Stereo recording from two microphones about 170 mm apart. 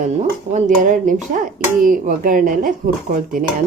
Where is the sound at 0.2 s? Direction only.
45° right (ahead or behind).